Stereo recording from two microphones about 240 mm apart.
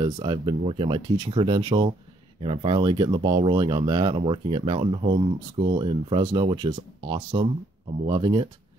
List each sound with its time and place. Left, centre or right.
0.0 s speech: centre